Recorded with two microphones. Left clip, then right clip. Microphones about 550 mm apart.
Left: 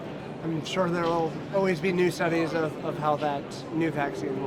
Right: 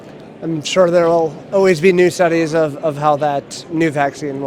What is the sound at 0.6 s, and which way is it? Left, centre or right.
Speech, right.